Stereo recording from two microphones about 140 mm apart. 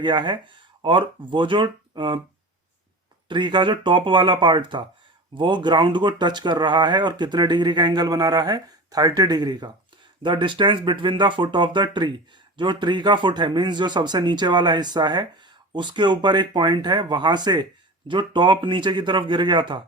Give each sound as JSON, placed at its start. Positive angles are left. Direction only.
{"t": 0.0, "sound": "speech", "side_deg": -35}
{"t": 3.2, "sound": "speech", "side_deg": -35}